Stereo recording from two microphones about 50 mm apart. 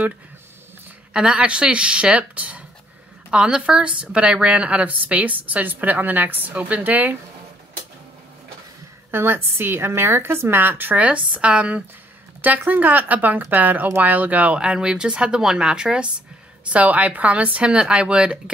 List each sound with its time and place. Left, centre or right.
1.1 s a woman's voice: right
9.1 s a woman's voice: right
10.6 s a woman's voice: right
11.1 s speech: right
12.6 s a woman's voice: right
14.6 s speech: centre
16.7 s speech: right